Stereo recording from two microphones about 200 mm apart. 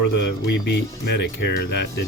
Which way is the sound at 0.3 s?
55° left (ahead or behind).